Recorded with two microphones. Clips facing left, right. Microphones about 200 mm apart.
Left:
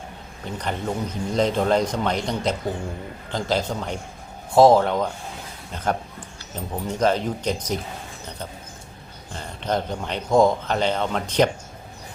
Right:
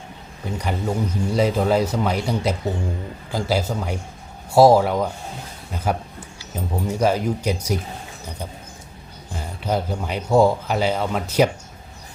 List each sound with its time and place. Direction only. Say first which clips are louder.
0.4 s a man's voice: right 2 dB; 10° right (ahead or behind)
9.3 s speech: right 1 dB; 10° right (ahead or behind)